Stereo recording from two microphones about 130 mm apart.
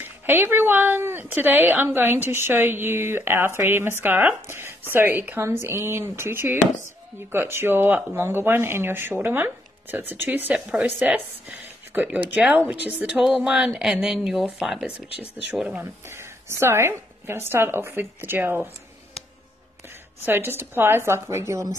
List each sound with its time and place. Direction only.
0.0 s a woman's voice: 15° right (ahead or behind)
15.8 s a woman's voice: 20° right (ahead or behind)
20.2 s a woman's voice: 15° right (ahead or behind)